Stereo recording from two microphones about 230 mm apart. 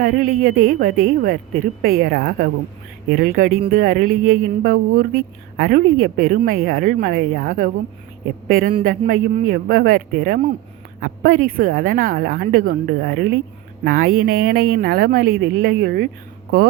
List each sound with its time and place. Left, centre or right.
0.0 s speech: right